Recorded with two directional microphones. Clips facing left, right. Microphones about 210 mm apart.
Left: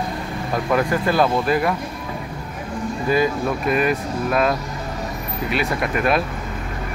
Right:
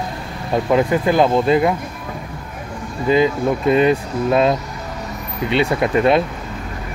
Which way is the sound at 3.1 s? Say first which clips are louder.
Right 5 dB; 25° right (ahead or behind).